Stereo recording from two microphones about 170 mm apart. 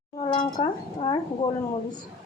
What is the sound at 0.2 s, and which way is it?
Speech, 25° left (ahead or behind).